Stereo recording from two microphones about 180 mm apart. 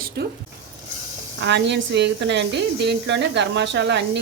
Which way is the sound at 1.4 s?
75° right (ahead or behind).